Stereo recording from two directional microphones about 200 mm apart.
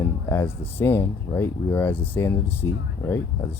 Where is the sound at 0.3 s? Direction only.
10° left (ahead or behind).